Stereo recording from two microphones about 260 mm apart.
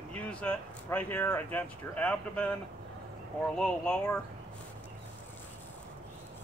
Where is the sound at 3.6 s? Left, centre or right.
Centre.